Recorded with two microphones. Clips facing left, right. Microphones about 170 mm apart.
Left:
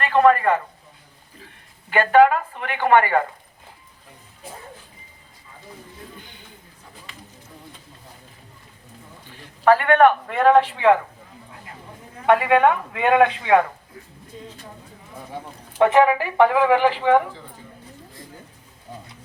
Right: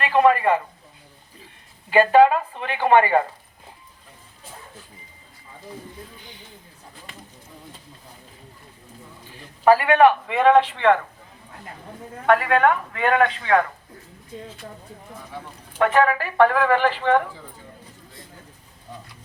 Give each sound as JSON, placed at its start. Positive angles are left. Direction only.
{"t": 0.0, "sound": "a sound", "side_deg": -15}
{"t": 1.9, "sound": "speech", "side_deg": -15}
{"t": 9.6, "sound": "a man's voice", "side_deg": -10}
{"t": 12.2, "sound": "speech", "side_deg": 15}
{"t": 15.8, "sound": "speech", "side_deg": 20}